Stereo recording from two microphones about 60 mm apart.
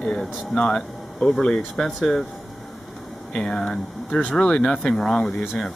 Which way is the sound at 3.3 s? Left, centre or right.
Centre.